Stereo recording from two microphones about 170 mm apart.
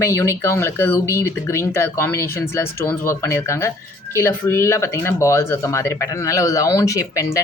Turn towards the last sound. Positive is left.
turn(degrees=20)  # may be behind; listen again after turning